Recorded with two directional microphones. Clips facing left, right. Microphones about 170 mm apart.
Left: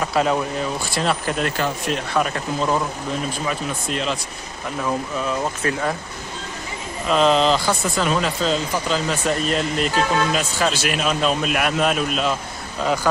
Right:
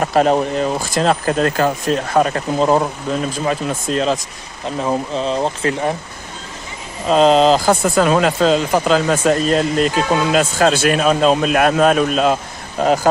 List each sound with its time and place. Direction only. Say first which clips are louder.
0.0 s speech: right 6 dB; 45° right (ahead or behind)
4.6 s speech: right 5 dB; 25° right (ahead or behind)
7.1 s speech: right 5 dB; 35° right (ahead or behind)
10.4 s speech: right 7 dB; 50° right (ahead or behind)
11.1 s speech: right 7 dB; 35° right (ahead or behind)